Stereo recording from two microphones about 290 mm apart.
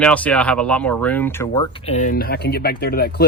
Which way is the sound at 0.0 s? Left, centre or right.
Centre.